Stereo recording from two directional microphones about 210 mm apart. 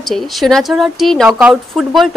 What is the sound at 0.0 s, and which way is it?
Speech, centre (ahead or behind).